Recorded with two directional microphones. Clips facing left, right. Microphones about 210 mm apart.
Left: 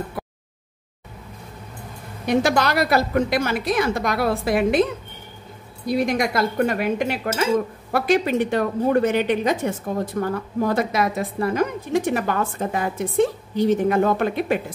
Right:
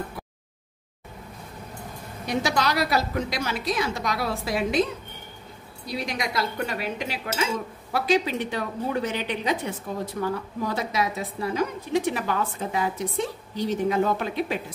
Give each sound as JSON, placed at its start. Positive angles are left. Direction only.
{"t": 2.2, "sound": "a woman's voice", "side_deg": 55}
{"t": 5.9, "sound": "a woman's voice", "side_deg": 50}